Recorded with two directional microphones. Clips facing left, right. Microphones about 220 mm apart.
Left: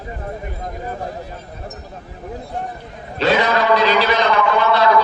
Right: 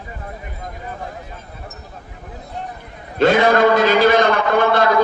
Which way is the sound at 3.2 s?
50° right (ahead or behind).